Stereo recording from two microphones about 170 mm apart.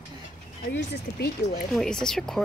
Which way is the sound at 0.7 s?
75° left (ahead or behind).